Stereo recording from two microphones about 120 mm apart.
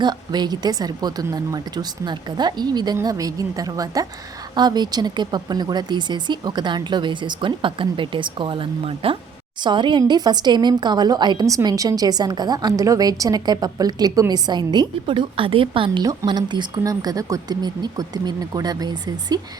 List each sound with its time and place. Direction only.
0.0 s a woman's voice: 35° right (ahead or behind)